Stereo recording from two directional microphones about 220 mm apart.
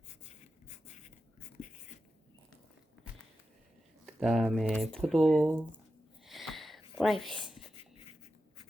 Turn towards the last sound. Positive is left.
turn(degrees=0)  # may be behind; listen again after turning